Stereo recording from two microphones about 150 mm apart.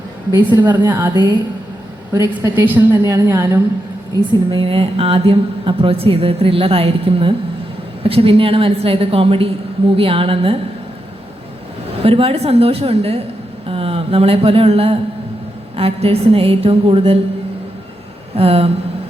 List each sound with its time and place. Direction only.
0.3 s a woman's voice: 25° right (ahead or behind)
4.2 s a woman's voice: 35° right (ahead or behind)
11.9 s a woman's voice: 40° right (ahead or behind)
18.3 s a woman's voice: 40° right (ahead or behind)